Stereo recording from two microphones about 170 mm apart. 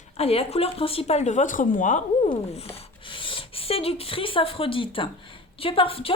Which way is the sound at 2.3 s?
35° left (ahead or behind).